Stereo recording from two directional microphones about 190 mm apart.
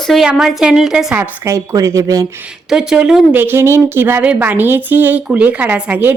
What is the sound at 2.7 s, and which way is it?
A woman's voice, 5° right (ahead or behind).